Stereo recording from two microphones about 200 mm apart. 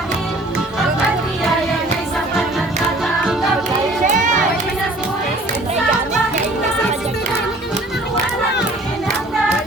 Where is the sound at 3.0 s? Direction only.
Centre (ahead or behind).